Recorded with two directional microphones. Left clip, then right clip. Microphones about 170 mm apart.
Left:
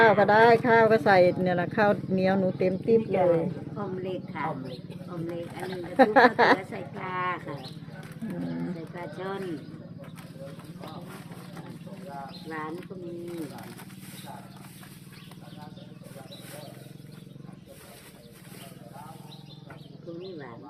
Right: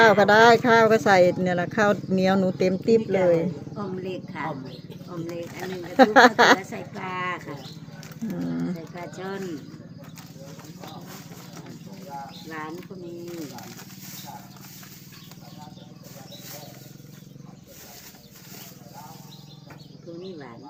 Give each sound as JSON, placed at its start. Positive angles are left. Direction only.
{"t": 0.0, "sound": "speech", "side_deg": -25}
{"t": 6.0, "sound": "a woman's voice", "side_deg": -25}
{"t": 9.1, "sound": "a woman's voice", "side_deg": -35}
{"t": 12.5, "sound": "a woman's voice", "side_deg": -40}